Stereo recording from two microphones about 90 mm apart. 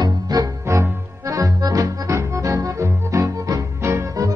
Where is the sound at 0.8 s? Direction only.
35° right (ahead or behind).